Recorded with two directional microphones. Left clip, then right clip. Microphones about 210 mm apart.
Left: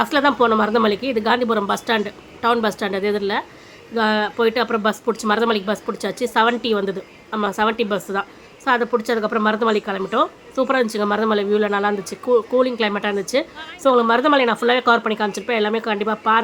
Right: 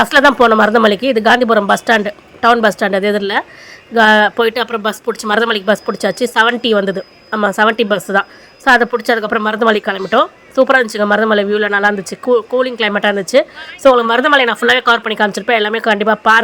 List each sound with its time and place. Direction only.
0.0 s speech: 30° right (ahead or behind)